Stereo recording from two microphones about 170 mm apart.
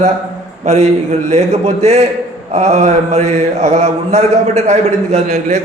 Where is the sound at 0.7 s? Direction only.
40° right (ahead or behind).